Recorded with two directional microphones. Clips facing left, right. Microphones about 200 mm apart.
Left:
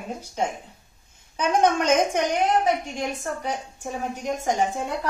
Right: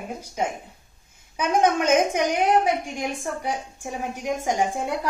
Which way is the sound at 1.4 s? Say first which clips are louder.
Even; 10° right (ahead or behind).